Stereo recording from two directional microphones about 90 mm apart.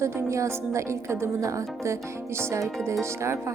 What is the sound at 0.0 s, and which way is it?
Speech, 35° right (ahead or behind).